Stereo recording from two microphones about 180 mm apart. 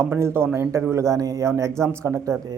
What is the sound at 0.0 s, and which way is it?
A man's voice, 15° right (ahead or behind).